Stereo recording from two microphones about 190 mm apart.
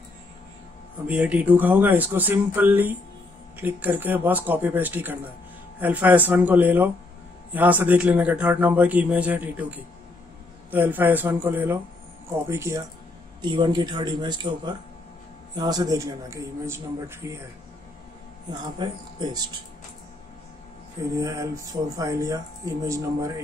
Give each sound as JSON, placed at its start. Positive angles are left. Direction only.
{"t": 1.0, "sound": "a man's voice", "side_deg": -5}
{"t": 18.5, "sound": "a man's voice", "side_deg": -25}
{"t": 21.1, "sound": "a man's voice", "side_deg": -20}